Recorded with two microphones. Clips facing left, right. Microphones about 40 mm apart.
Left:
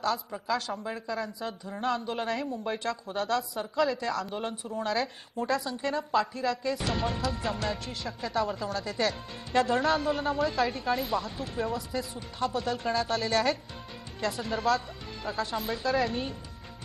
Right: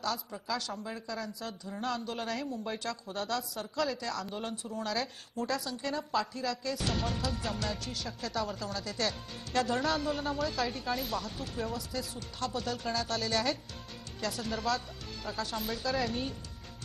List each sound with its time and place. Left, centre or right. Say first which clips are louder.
0.3 s a woman's voice: left 5 dB; centre
3.5 s a woman's voice: left 5 dB; centre